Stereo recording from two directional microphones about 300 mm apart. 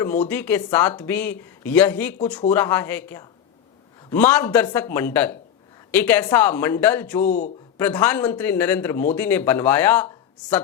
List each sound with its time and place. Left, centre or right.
0.0 s speech: centre
7.3 s a man's voice: left
7.8 s speech: centre